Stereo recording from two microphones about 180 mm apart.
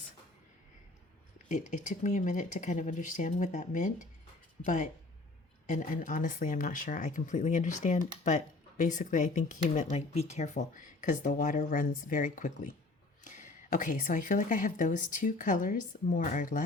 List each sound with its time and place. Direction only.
1.5 s a woman's voice: 40° left (ahead or behind)